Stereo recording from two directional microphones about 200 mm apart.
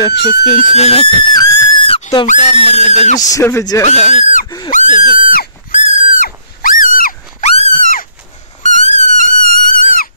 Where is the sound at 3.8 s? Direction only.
35° left (ahead or behind).